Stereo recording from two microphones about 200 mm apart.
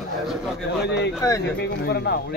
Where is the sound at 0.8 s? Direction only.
60° left (ahead or behind).